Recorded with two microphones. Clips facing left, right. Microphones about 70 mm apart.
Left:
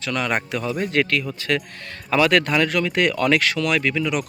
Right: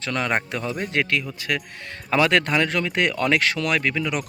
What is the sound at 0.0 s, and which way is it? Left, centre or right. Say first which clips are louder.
Speech: left 1 dB; right.